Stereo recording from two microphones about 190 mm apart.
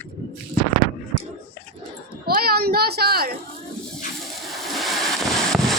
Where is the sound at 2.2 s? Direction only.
55° right (ahead or behind).